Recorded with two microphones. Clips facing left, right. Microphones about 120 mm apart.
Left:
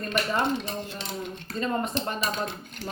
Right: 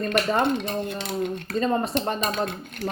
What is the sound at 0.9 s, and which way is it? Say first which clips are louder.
Dishes: right 7 dB; 60° right (ahead or behind).